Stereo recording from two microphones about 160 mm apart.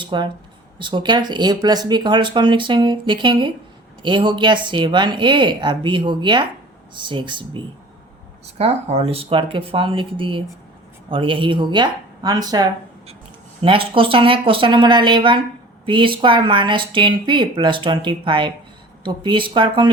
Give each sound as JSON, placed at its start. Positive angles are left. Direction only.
{"t": 0.0, "sound": "speech", "side_deg": -30}
{"t": 8.5, "sound": "speech", "side_deg": -40}